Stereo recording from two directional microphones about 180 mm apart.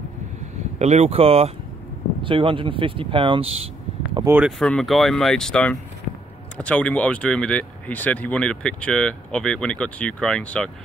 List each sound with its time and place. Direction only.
0.7 s speech: 35° right (ahead or behind)
4.2 s speech: 10° right (ahead or behind)
4.5 s speech: 5° left (ahead or behind)